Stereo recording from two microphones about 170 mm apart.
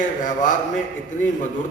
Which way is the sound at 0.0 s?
50° left (ahead or behind).